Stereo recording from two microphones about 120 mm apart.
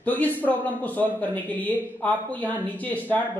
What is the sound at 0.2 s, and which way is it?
Speech, 15° left (ahead or behind).